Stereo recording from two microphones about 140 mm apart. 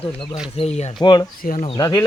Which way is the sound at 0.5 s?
45° left (ahead or behind).